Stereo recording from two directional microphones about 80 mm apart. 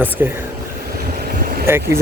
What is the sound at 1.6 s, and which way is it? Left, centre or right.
Speech, right.